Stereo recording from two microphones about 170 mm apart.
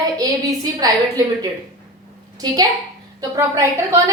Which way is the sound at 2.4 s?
25° right (ahead or behind).